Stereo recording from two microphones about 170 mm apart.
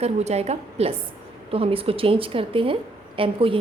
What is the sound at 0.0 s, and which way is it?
A woman's voice, 40° right (ahead or behind).